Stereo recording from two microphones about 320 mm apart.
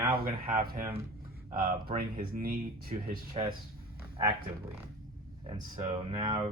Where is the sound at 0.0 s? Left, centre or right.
Right.